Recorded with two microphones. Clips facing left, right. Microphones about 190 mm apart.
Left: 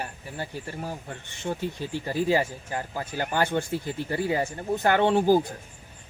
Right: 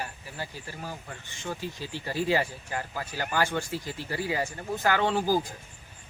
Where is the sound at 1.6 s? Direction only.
50° left (ahead or behind).